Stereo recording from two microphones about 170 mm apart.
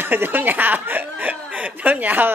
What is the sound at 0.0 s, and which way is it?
Speech, 10° right (ahead or behind).